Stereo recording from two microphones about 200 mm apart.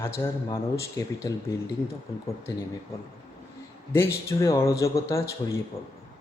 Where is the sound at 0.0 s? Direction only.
15° left (ahead or behind).